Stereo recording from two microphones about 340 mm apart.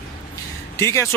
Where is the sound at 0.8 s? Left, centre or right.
Centre.